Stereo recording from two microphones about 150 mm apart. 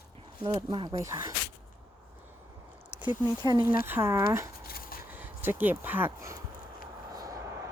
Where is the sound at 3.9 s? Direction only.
15° right (ahead or behind).